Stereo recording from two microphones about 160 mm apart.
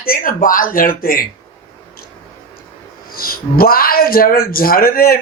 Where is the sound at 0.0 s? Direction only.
60° left (ahead or behind).